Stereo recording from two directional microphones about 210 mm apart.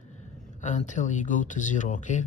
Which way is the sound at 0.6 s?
35° left (ahead or behind).